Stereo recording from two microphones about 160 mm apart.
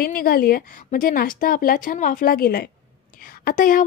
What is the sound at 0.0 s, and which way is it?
A woman's voice, 65° left (ahead or behind).